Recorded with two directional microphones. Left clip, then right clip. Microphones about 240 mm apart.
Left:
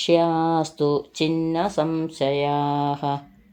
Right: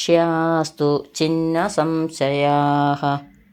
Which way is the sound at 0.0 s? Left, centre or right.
Centre.